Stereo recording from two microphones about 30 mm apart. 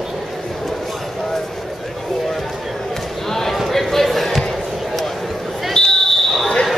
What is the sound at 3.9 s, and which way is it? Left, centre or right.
Basketball bounce, centre.